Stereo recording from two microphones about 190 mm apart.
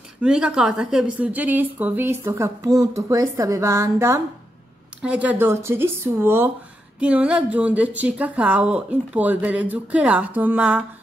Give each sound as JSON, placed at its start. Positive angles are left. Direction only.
{"t": 0.2, "sound": "a woman's voice", "side_deg": -5}